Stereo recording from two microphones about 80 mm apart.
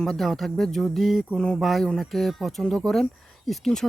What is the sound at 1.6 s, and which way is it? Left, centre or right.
Speech, centre.